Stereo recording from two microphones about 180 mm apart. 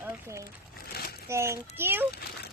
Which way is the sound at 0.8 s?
60° left (ahead or behind).